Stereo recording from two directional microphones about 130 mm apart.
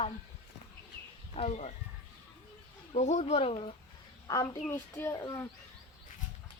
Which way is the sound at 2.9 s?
60° left (ahead or behind).